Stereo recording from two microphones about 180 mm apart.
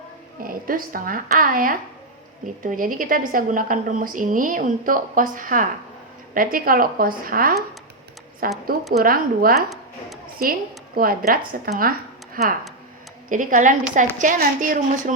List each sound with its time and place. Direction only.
0.4 s a woman's voice: 50° right (ahead or behind)
10.9 s a woman's voice: 55° right (ahead or behind)
11.8 s a sound: 55° right (ahead or behind)
13.3 s a woman's voice: 45° right (ahead or behind)